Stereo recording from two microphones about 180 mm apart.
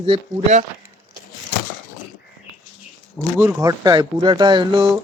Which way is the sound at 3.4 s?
15° right (ahead or behind).